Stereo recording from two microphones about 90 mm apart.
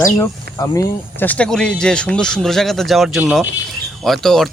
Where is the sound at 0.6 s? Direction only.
45° left (ahead or behind).